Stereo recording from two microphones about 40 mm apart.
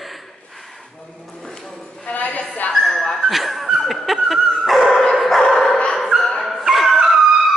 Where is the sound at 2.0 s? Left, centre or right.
Left.